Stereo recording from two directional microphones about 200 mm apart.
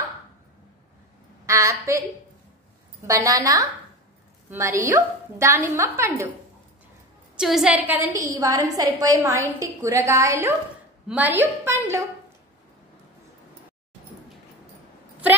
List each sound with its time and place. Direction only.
1.4 s a woman's voice: 15° right (ahead or behind)
3.1 s a woman's voice: 15° right (ahead or behind)
7.3 s a woman's voice: 5° right (ahead or behind)